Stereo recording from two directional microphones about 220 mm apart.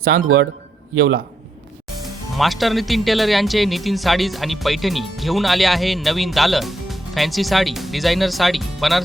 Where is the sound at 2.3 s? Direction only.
Centre (ahead or behind).